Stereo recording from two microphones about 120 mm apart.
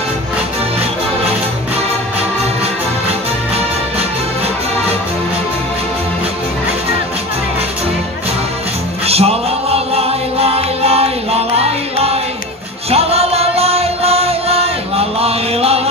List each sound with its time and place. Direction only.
9.0 s music: 55° right (ahead or behind)